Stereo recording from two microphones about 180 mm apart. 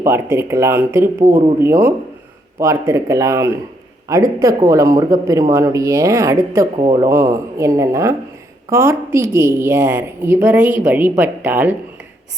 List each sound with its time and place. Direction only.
0.0 s speech: 15° right (ahead or behind)